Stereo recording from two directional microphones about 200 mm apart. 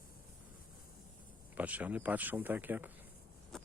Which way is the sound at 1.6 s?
5° right (ahead or behind).